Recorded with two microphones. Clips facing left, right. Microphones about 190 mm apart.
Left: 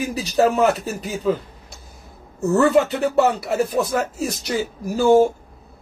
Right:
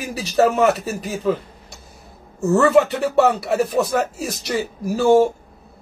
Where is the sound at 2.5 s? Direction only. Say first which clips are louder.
Right 1 dB; centre (ahead or behind).